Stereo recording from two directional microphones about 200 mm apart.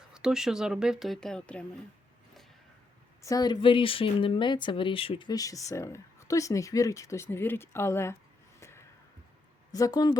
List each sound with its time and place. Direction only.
0.1 s speech: 5° right (ahead or behind)
3.2 s speech: 20° left (ahead or behind)
8.6 s a sound: 15° left (ahead or behind)
9.7 s speech: 20° left (ahead or behind)